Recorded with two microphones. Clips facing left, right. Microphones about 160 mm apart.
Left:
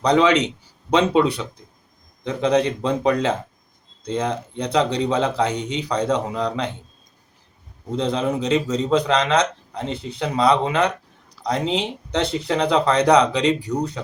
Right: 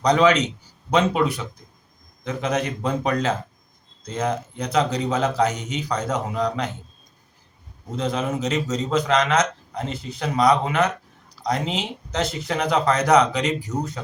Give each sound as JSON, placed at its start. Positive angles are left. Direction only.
{"t": 0.0, "sound": "speech", "side_deg": 30}
{"t": 7.9, "sound": "speech", "side_deg": 30}